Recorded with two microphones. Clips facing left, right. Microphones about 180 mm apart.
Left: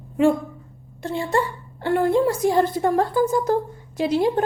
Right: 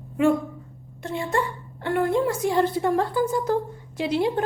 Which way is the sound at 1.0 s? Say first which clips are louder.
Left 3 dB; 35° left (ahead or behind).